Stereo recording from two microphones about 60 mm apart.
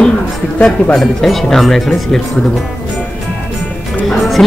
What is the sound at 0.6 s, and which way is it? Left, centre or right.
Speech, centre.